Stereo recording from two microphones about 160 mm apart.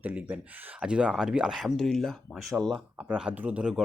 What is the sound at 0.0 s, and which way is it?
Speech, 10° right (ahead or behind).